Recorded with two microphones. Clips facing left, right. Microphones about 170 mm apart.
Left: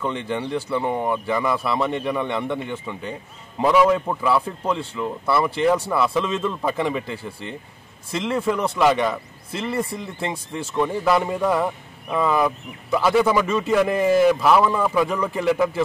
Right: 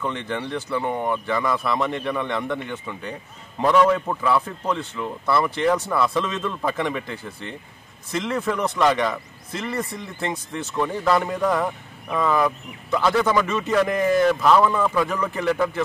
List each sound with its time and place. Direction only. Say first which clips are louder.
0.0 s a man's voice: left 2 dB; centre (ahead or behind)
10.8 s speech: left 1 dB; 10° left (ahead or behind)